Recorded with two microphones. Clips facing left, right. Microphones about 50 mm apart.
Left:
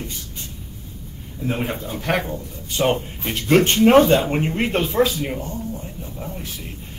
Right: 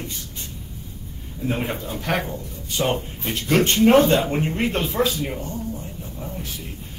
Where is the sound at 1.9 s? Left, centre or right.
Left.